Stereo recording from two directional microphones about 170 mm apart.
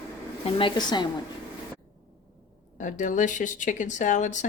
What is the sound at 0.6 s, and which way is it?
Speech, 25° left (ahead or behind).